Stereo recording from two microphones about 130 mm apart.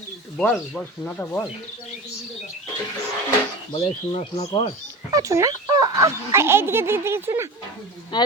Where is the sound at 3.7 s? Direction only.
45° left (ahead or behind).